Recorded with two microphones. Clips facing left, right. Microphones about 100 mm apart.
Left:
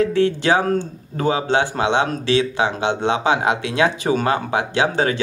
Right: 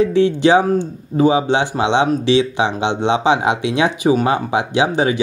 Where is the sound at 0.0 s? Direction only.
20° right (ahead or behind).